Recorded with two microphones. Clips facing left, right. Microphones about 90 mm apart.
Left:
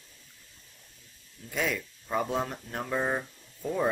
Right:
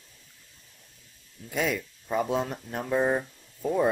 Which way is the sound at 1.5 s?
15° right (ahead or behind).